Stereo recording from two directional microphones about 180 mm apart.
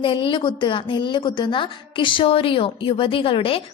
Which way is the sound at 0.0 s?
30° left (ahead or behind).